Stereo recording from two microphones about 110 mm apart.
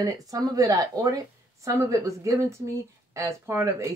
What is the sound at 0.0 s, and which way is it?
Speech, 35° right (ahead or behind).